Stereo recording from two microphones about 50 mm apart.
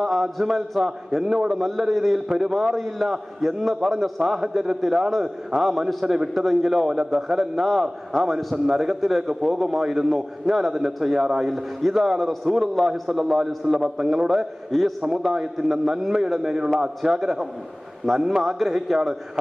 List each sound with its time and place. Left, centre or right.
0.0 s a man's voice: centre
18.1 s a man's voice: centre